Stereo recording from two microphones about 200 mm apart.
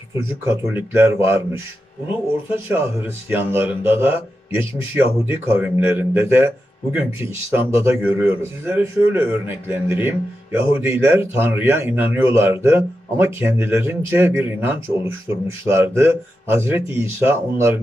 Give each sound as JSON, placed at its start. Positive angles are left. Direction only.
{"t": 0.1, "sound": "speech", "side_deg": -15}
{"t": 2.7, "sound": "speech", "side_deg": -10}